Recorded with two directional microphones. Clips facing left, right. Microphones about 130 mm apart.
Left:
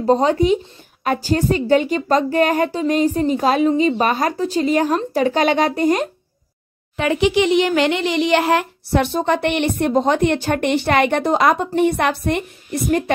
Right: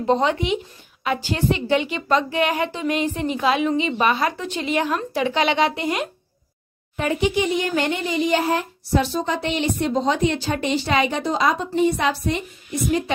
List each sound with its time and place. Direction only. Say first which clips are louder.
0.0 s a woman's voice: left 5 dB; 40° left (ahead or behind)
7.0 s speech: left 4 dB; 90° left; by 13.0 s 55° left (ahead or behind)